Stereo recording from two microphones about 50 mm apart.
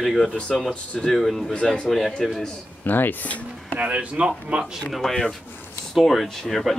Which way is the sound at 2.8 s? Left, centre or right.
Left.